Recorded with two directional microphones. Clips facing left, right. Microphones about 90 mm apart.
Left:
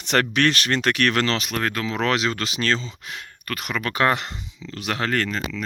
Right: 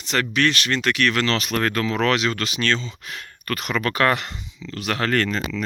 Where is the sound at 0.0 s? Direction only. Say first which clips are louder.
Left 1 dB; 50° left (ahead or behind).